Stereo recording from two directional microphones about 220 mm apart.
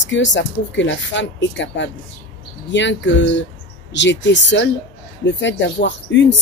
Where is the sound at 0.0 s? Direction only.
55° left (ahead or behind).